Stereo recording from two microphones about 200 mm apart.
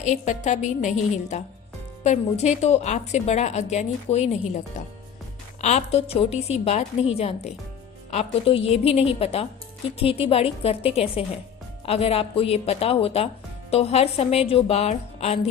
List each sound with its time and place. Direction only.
0.0 s a woman's voice: 35° left (ahead or behind)